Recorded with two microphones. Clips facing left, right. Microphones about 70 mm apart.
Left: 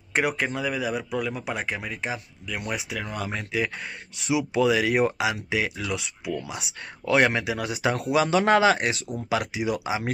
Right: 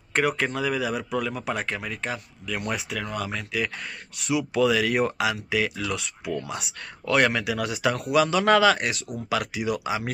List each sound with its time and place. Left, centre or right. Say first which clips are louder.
0.3 s speech: right 1 dB; centre
3.0 s speech: right 1 dB; left
7.1 s speech: left 1 dB; left